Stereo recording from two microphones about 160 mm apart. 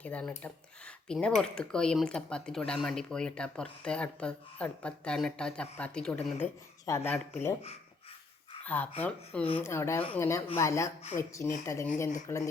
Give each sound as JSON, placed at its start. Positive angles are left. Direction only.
{"t": 0.0, "sound": "speech", "side_deg": 10}
{"t": 8.6, "sound": "speech", "side_deg": 10}